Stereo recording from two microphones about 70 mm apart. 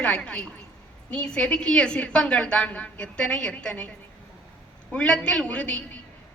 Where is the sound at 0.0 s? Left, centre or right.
Centre.